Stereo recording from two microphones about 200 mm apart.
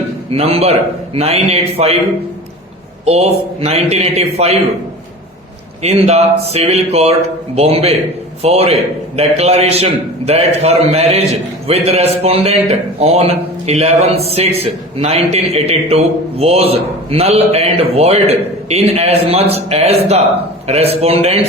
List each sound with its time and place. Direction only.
0.3 s a man's voice: 30° right (ahead or behind)
3.1 s a man's voice: 30° right (ahead or behind)
5.8 s a man's voice: 30° right (ahead or behind)